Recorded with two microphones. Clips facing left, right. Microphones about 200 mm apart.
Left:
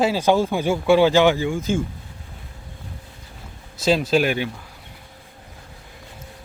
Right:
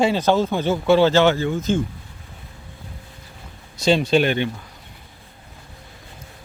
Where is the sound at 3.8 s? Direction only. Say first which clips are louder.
Right 1 dB; centre (ahead or behind).